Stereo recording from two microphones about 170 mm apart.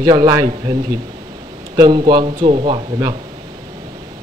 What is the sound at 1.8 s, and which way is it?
Speech, 25° right (ahead or behind).